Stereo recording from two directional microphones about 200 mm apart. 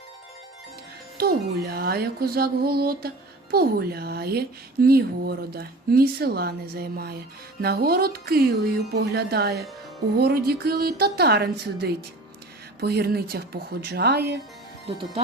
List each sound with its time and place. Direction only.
1.2 s speech: 50° right (ahead or behind)